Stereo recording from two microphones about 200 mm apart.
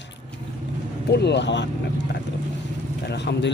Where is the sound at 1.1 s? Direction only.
55° left (ahead or behind).